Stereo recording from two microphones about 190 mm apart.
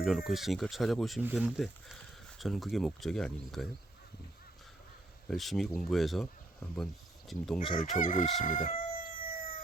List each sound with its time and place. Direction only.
0.0 s speech: centre (ahead or behind)
5.3 s speech: centre (ahead or behind)
7.7 s crowing: 45° left (ahead or behind)